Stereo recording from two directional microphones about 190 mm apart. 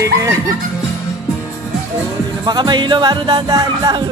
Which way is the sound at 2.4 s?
20° right (ahead or behind).